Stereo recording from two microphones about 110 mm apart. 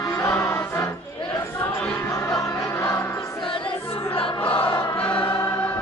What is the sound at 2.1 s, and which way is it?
Music, 30° left (ahead or behind).